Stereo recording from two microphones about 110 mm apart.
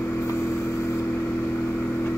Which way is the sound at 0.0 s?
20° left (ahead or behind).